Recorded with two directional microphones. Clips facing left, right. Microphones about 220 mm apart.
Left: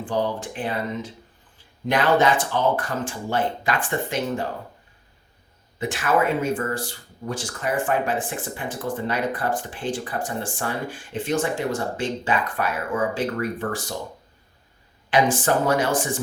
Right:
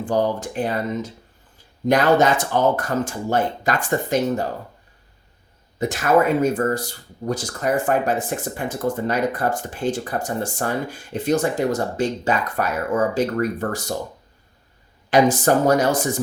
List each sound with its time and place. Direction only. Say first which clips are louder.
0.0 s speech: right 4 dB; 40° right (ahead or behind)
5.8 s speech: right 4 dB; 40° right (ahead or behind)
15.1 s speech: right 4 dB; 40° right (ahead or behind)